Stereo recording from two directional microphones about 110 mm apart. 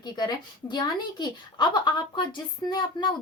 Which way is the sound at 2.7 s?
40° left (ahead or behind).